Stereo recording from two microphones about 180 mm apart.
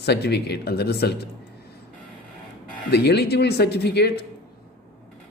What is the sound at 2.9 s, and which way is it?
Speech, 65° left (ahead or behind).